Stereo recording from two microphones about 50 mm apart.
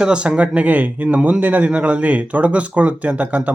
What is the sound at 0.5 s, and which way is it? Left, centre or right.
Speech, right.